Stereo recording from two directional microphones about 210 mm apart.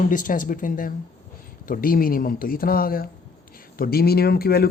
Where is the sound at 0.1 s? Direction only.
40° left (ahead or behind).